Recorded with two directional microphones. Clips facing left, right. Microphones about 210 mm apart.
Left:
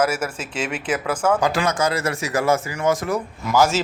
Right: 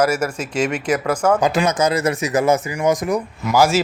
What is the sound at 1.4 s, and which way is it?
Speech, 20° right (ahead or behind).